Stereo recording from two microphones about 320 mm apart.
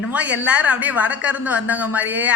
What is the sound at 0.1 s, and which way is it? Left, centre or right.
A woman's voice, centre.